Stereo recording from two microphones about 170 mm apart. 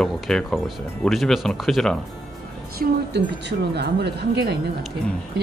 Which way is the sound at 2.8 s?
80° right.